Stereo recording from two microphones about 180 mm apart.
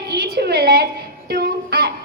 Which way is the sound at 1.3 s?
60° right (ahead or behind).